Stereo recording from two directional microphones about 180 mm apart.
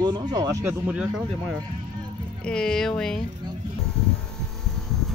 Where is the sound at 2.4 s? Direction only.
5° left (ahead or behind).